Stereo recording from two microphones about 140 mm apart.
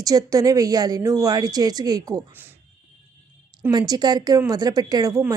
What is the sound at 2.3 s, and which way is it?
Speech, 15° right (ahead or behind).